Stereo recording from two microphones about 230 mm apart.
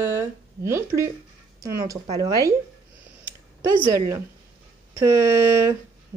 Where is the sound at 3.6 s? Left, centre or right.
Centre.